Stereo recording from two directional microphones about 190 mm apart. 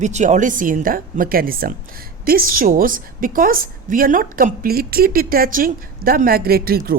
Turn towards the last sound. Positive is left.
turn(degrees=-50)  # may be behind; listen again after turning